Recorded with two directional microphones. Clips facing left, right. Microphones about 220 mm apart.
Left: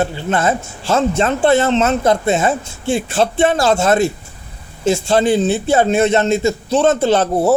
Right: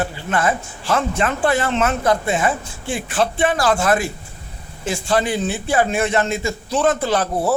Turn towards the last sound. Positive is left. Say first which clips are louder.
# left 6 dB
turn(degrees=25)  # may be behind; listen again after turning